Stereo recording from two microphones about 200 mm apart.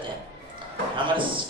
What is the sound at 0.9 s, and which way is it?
Speech, 25° right (ahead or behind).